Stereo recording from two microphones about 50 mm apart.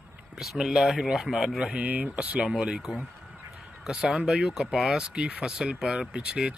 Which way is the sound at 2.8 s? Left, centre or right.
Centre.